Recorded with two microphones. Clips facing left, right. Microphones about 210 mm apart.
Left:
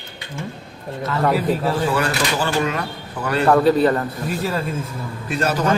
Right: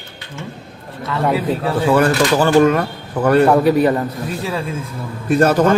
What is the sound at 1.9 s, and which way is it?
Speech, 55° right (ahead or behind).